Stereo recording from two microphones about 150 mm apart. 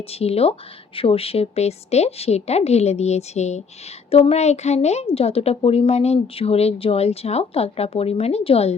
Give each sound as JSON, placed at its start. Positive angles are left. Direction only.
{"t": 0.1, "sound": "a woman's voice", "side_deg": 40}